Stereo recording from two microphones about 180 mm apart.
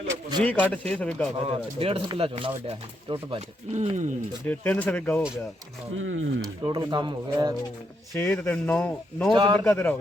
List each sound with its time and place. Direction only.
0.1 s a sound: 25° right (ahead or behind)
0.4 s speech: 10° left (ahead or behind)
1.5 s speech: 30° right (ahead or behind)
4.4 s speech: 10° left (ahead or behind)
6.0 s speech: 90° right
6.7 s speech: 25° right (ahead or behind)
8.1 s speech: 15° left (ahead or behind)
9.3 s speech: 25° right (ahead or behind)
9.6 s speech: 10° left (ahead or behind)